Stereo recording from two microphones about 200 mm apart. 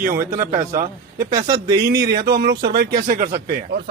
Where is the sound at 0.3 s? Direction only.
40° right (ahead or behind).